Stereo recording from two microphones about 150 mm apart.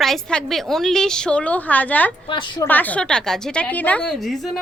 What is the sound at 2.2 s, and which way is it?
Speech, 30° left (ahead or behind).